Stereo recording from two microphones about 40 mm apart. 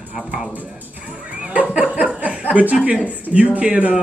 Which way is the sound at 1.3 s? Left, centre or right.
Right.